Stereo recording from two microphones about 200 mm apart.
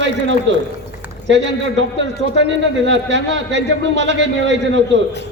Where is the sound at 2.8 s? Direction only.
65° right (ahead or behind).